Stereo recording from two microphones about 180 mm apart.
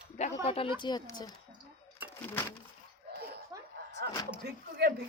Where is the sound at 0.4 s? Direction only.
30° left (ahead or behind).